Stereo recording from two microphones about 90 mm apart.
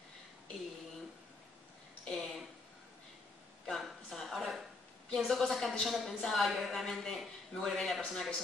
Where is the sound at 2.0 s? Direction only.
Centre (ahead or behind).